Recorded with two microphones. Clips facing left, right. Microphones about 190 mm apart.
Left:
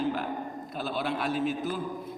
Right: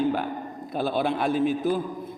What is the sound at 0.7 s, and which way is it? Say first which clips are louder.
A man's voice: right 7 dB; 55° right (ahead or behind).